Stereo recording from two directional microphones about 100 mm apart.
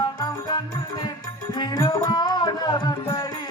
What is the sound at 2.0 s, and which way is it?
Music, 40° left (ahead or behind).